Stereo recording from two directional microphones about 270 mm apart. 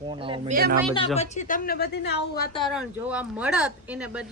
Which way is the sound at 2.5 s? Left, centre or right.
Centre.